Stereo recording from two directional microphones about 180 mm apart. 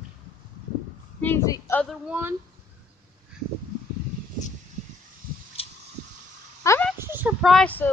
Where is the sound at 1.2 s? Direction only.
15° left (ahead or behind).